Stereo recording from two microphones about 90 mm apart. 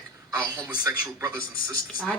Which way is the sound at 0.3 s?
45° right (ahead or behind).